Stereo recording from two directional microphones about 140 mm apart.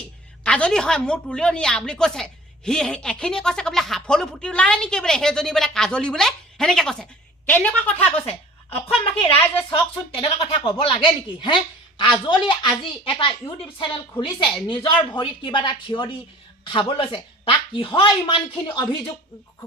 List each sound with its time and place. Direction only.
0.4 s a woman's voice: 5° left (ahead or behind)
8.2 s a sound: 40° left (ahead or behind)
10.2 s speech: 40° left (ahead or behind)